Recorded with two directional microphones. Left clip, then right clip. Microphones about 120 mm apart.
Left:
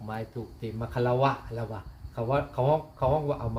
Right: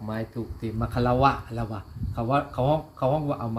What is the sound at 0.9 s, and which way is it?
Speech, 30° left (ahead or behind).